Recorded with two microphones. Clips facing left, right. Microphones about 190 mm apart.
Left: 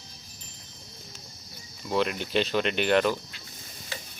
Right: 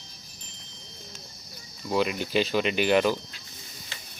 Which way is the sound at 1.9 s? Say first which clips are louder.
Right 1 dB; 5° right (ahead or behind).